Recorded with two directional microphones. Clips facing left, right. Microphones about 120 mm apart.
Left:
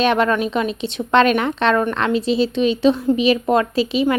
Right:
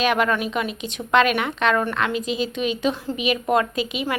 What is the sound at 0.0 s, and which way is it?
A woman's voice, 30° left (ahead or behind).